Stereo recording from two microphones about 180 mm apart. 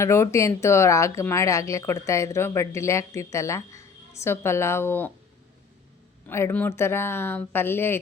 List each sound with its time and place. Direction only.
0.0 s speech: 15° left (ahead or behind)
6.2 s speech: 10° left (ahead or behind)